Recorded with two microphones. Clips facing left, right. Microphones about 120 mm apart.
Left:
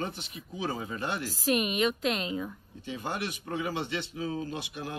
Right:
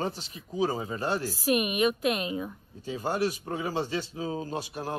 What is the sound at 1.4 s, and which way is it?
A woman's voice, 15° right (ahead or behind).